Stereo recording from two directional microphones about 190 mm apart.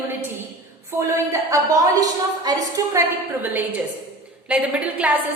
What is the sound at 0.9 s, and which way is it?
A woman's voice, 15° right (ahead or behind).